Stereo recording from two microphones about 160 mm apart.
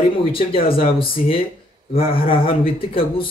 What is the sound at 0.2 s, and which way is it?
Speech, 35° left (ahead or behind).